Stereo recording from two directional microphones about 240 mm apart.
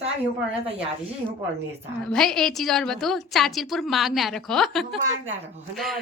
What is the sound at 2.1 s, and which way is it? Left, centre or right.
A woman's voice, centre.